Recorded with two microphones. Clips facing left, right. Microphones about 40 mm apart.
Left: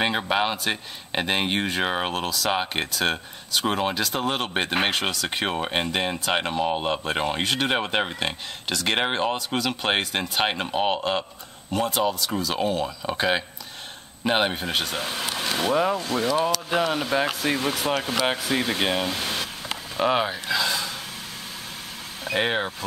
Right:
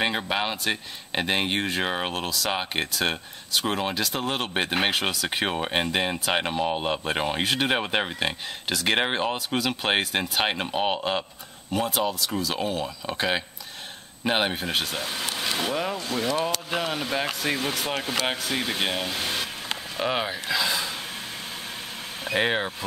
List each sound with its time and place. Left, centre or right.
0.0 s speech: centre
15.0 s speech: centre
22.3 s speech: centre